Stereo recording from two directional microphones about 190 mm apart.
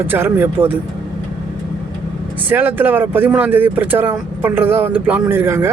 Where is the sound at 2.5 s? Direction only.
10° right (ahead or behind).